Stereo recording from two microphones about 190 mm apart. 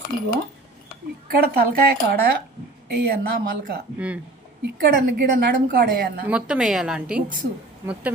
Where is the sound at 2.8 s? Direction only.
55° right (ahead or behind).